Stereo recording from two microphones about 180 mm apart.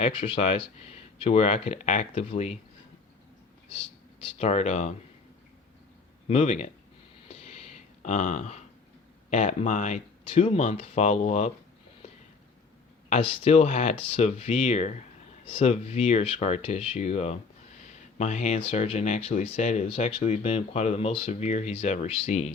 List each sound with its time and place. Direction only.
0.0 s speech: 30° left (ahead or behind)
3.7 s speech: 30° left (ahead or behind)
6.2 s speech: 40° left (ahead or behind)
7.3 s a sound: 35° left (ahead or behind)
9.3 s speech: 40° left (ahead or behind)
13.1 s speech: 30° left (ahead or behind)